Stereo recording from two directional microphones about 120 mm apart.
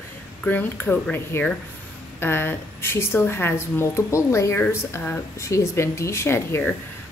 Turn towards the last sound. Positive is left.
turn(degrees=20)  # may be behind; listen again after turning